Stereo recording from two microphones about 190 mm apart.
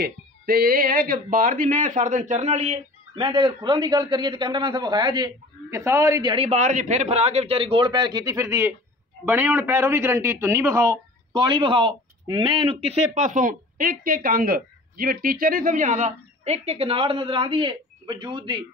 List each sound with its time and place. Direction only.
0.0 s speech: 50° right (ahead or behind); by 6.3 s 15° right (ahead or behind)
6.3 s speech: 35° right (ahead or behind)